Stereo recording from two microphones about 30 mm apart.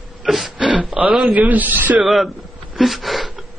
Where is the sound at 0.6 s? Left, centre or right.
Centre.